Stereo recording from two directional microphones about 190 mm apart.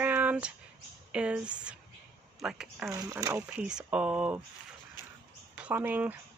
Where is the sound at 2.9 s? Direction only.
20° right (ahead or behind).